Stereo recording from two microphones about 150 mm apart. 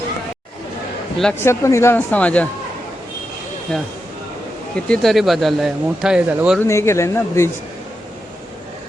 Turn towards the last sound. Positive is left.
turn(degrees=20)  # may be behind; listen again after turning